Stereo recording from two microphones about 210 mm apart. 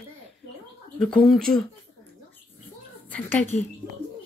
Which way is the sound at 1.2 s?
Centre (ahead or behind).